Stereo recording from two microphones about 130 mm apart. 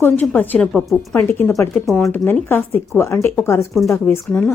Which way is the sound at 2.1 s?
15° left (ahead or behind).